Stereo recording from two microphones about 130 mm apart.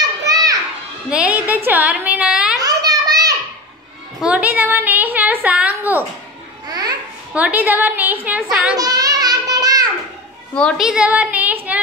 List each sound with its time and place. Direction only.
0.0 s children playing: 30° right (ahead or behind)
1.1 s a woman's voice: 10° right (ahead or behind)
1.7 s a sound: 10° right (ahead or behind)
2.6 s a sound: 30° right (ahead or behind)
4.2 s a woman's voice: 10° right (ahead or behind)
6.7 s babbling: 30° right (ahead or behind)
7.3 s a woman's voice: 10° right (ahead or behind)
8.7 s a sound: 30° right (ahead or behind)
10.5 s a woman's voice: 10° left (ahead or behind)
10.8 s child singing: 5° right (ahead or behind)